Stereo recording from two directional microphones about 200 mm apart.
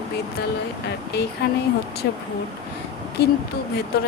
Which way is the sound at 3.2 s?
55° left (ahead or behind).